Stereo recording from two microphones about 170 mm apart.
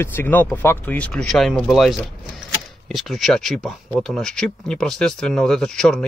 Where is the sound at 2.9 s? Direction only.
Centre (ahead or behind).